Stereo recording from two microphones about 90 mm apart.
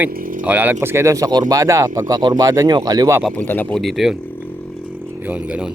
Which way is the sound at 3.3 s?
20° left (ahead or behind).